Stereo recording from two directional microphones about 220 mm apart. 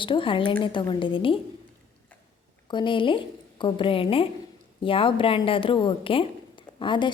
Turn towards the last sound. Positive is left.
turn(degrees=20)  # may be behind; listen again after turning